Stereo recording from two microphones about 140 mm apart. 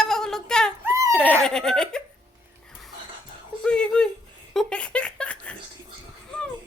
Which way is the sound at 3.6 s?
5° left (ahead or behind).